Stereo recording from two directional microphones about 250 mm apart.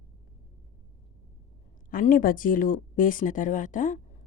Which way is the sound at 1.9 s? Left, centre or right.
Left.